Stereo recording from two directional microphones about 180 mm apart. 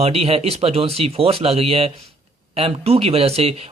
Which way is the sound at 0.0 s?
35° right (ahead or behind).